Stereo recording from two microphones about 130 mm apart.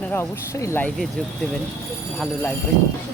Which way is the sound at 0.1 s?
20° left (ahead or behind).